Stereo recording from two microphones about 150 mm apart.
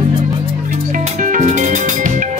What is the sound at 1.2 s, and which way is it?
Music, 55° right (ahead or behind).